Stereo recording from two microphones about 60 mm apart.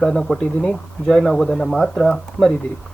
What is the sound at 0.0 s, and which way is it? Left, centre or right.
Speech, centre.